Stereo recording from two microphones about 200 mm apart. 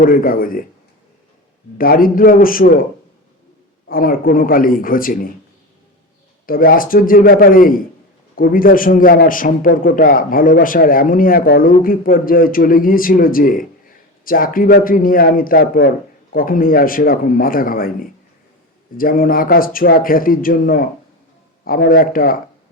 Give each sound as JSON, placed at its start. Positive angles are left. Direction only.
{"t": 0.0, "sound": "a man's voice", "side_deg": 45}
{"t": 1.8, "sound": "a man's voice", "side_deg": 45}
{"t": 3.8, "sound": "a man's voice", "side_deg": 45}
{"t": 6.4, "sound": "a man's voice", "side_deg": 45}